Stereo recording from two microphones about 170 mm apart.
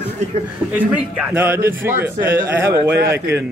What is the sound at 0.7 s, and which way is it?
A man's voice, 10° right (ahead or behind).